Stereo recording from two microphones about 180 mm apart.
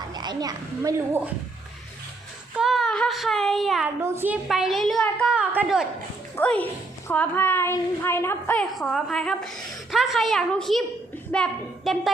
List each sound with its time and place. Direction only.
0.1 s a child's voice: 20° right (ahead or behind)
2.6 s child singing: centre (ahead or behind)
4.0 s a child's voice: 15° right (ahead or behind)
4.4 s a woman's voice: centre (ahead or behind)
6.3 s a woman's voice: 10° left (ahead or behind)
8.7 s a woman's voice: centre (ahead or behind)